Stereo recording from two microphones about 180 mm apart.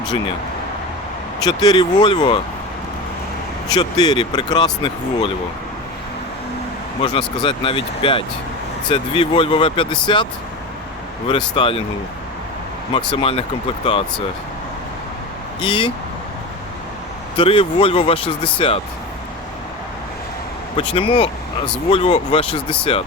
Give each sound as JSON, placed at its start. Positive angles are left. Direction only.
{"t": 1.5, "sound": "speech", "side_deg": 20}
{"t": 3.8, "sound": "speech", "side_deg": 25}
{"t": 7.0, "sound": "speech", "side_deg": 30}
{"t": 11.3, "sound": "speech", "side_deg": 30}
{"t": 12.9, "sound": "speech", "side_deg": 30}
{"t": 15.6, "sound": "speech", "side_deg": 30}
{"t": 17.3, "sound": "speech", "side_deg": 30}
{"t": 20.7, "sound": "speech", "side_deg": 30}